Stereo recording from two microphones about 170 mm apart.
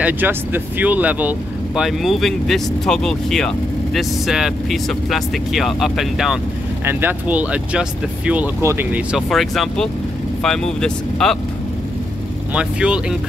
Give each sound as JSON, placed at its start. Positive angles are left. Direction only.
{"t": 0.0, "sound": "speech", "side_deg": -10}
{"t": 12.5, "sound": "speech", "side_deg": -5}